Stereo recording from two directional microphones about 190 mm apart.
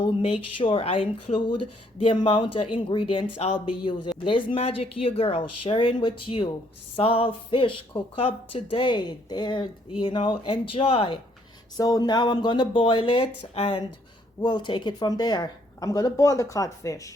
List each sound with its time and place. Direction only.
0.0 s speech: 30° left (ahead or behind)